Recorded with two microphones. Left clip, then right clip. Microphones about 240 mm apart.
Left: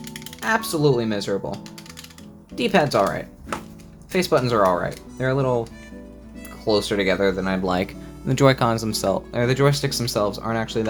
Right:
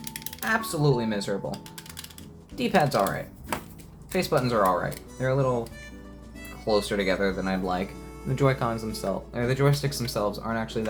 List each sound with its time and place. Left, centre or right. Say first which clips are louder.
0.0 s music: left 3 dB; centre
0.4 s speech: left 5 dB; left
2.6 s speech: left 4 dB; left
4.1 s speech: left 5 dB; left
6.7 s speech: left 4 dB; left